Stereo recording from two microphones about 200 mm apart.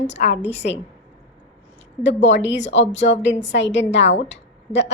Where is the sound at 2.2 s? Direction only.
65° left (ahead or behind).